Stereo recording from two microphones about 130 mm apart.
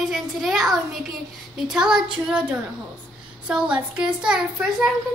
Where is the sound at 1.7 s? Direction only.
5° right (ahead or behind).